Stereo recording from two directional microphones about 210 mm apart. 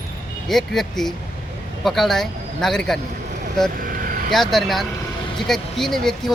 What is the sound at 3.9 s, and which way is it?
Vehicle, 40° right (ahead or behind).